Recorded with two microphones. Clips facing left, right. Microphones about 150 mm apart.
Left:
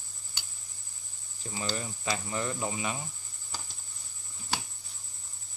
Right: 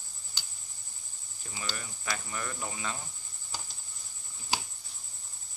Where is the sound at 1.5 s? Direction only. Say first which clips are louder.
Left 6 dB; 25° left (ahead or behind).